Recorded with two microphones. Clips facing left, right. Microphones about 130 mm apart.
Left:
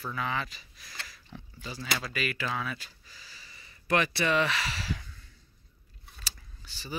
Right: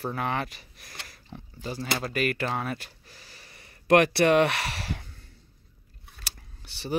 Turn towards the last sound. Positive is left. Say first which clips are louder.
# right 8 dB
turn(degrees=-70)  # may be behind; listen again after turning